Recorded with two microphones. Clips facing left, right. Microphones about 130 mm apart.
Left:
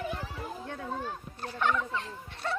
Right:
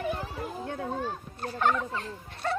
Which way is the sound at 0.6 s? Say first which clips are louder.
Right 5 dB; 50° right (ahead or behind).